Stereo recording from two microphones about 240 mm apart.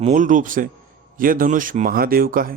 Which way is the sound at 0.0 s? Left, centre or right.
Right.